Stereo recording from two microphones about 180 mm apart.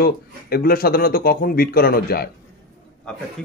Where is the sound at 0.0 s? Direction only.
55° left (ahead or behind).